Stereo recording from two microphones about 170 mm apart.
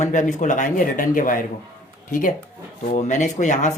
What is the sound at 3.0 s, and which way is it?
Speech, 45° left (ahead or behind).